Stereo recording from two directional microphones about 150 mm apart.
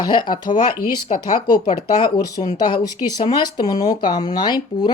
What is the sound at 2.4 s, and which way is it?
Speech, 45° left (ahead or behind).